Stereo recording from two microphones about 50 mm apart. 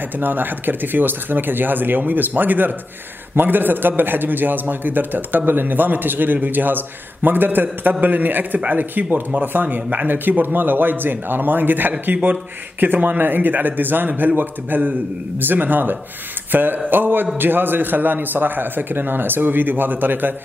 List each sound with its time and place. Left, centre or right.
0.2 s a man's voice: right